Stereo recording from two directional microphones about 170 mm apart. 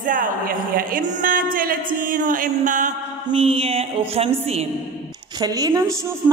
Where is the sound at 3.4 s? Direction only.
35° right (ahead or behind).